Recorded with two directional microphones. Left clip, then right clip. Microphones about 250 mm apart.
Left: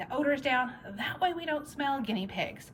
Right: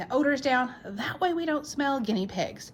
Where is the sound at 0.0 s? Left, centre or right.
Centre.